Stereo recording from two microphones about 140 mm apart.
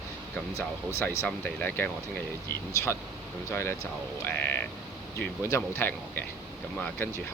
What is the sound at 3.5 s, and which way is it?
Speech, 15° left (ahead or behind).